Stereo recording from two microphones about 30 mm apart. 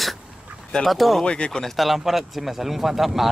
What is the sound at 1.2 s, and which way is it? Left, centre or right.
Speech, left.